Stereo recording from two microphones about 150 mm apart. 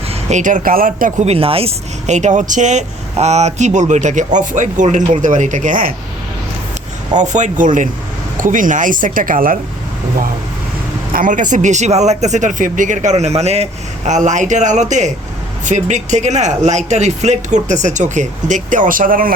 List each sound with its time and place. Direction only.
0.1 s speech: 50° right (ahead or behind)
1.2 s speech: 40° right (ahead or behind); by 5.9 s 60° right (ahead or behind)
7.2 s speech: 55° right (ahead or behind)
11.1 s speech: 60° right (ahead or behind)